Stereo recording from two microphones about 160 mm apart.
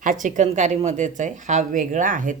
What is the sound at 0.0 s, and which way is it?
Speech, 55° right (ahead or behind).